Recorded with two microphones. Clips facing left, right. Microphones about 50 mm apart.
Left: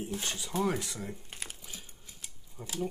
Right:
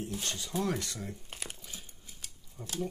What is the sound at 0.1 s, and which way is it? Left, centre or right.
Speech, centre.